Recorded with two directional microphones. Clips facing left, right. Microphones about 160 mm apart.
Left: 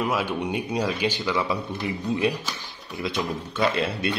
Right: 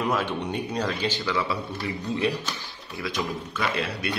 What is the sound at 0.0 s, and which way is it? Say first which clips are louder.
A man's voice: left 1 dB; 10° left (ahead or behind).